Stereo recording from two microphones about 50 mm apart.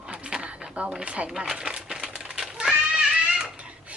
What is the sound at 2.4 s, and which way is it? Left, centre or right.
Cat, centre.